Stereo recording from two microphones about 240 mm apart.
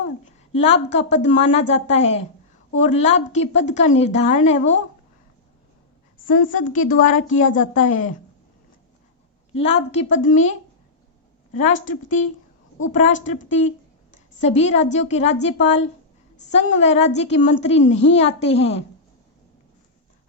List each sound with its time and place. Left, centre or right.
0.5 s a woman's voice: left
6.2 s a woman's voice: left
9.6 s a woman's voice: left
11.5 s a woman's voice: left